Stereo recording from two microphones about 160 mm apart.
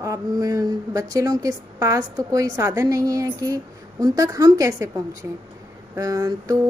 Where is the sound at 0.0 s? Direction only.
20° right (ahead or behind).